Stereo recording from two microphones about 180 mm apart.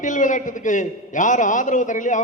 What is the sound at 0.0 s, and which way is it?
A man's voice, 45° left (ahead or behind).